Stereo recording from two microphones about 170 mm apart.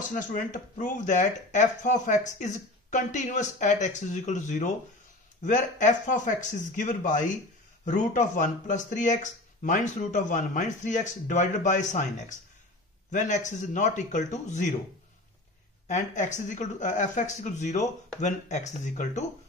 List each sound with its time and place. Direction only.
0.1 s speech: 50° left (ahead or behind)
15.9 s speech: 45° left (ahead or behind)